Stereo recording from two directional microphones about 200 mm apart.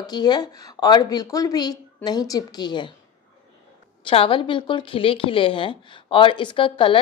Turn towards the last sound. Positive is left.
turn(degrees=25)  # may be behind; listen again after turning